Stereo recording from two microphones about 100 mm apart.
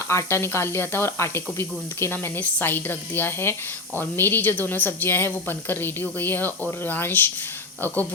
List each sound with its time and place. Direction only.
0.1 s speech: 25° left (ahead or behind)